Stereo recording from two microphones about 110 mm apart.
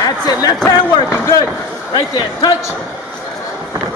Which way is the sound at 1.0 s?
30° left (ahead or behind).